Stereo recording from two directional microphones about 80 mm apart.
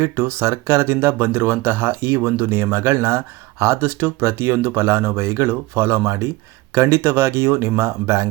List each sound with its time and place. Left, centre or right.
0.0 s speech: right
0.9 s speech: right